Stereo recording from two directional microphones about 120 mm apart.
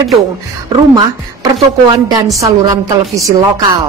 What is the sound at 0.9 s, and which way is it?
A woman's voice, 35° right (ahead or behind).